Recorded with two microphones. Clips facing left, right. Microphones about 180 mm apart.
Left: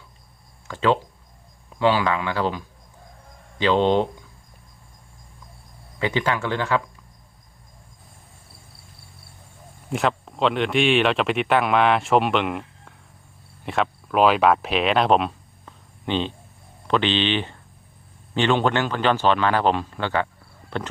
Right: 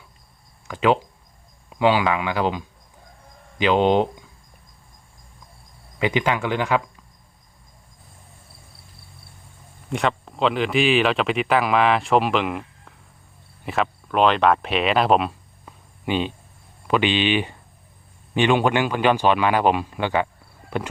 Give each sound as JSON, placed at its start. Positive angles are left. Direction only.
{"t": 0.7, "sound": "speech", "side_deg": -15}
{"t": 6.0, "sound": "speech", "side_deg": -15}
{"t": 9.9, "sound": "speech", "side_deg": 0}